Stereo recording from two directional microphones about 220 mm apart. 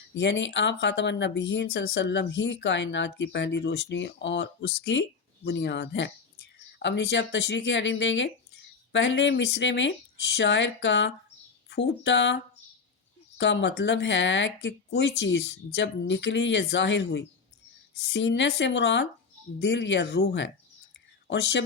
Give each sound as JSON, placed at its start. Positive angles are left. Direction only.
{"t": 0.1, "sound": "speech", "side_deg": 55}
{"t": 13.4, "sound": "speech", "side_deg": 55}